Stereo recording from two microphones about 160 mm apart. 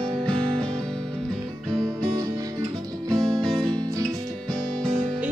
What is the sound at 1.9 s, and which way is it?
Music, 20° right (ahead or behind).